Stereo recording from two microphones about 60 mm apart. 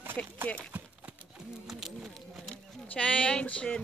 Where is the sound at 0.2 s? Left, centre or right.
Left.